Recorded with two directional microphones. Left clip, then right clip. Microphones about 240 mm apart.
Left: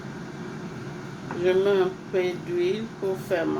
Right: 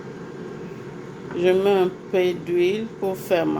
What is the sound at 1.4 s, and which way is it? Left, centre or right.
Speech, right.